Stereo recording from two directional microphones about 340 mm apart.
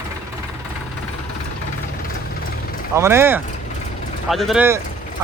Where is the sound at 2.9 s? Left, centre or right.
Centre.